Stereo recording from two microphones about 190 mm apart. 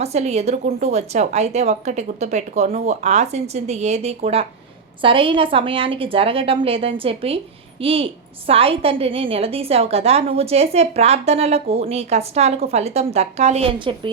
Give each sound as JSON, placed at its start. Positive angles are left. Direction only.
{"t": 0.0, "sound": "a woman's voice", "side_deg": -35}